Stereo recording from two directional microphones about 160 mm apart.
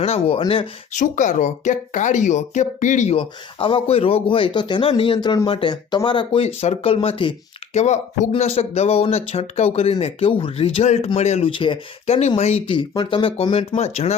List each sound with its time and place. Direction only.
0.0 s speech: 40° left (ahead or behind)
0.9 s speech: 50° left (ahead or behind)
3.2 s speech: 35° left (ahead or behind)
7.7 s speech: 45° left (ahead or behind)